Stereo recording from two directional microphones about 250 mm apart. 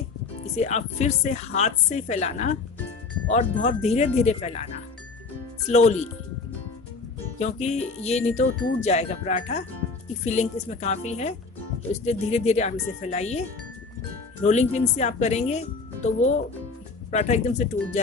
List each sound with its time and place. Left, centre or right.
0.7 s speech: left
5.7 s speech: left
7.3 s speech: left
14.4 s speech: left